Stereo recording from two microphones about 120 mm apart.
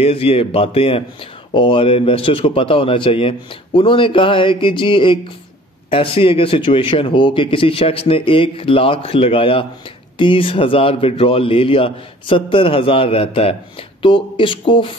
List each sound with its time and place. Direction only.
0.0 s speech: 50° left (ahead or behind)